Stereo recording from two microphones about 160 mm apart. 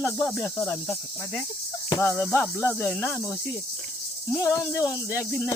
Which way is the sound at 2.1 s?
5° left (ahead or behind).